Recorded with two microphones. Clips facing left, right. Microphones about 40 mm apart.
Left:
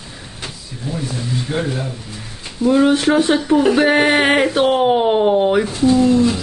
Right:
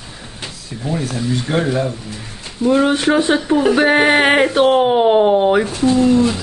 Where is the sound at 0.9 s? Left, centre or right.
Right; by 5.6 s centre.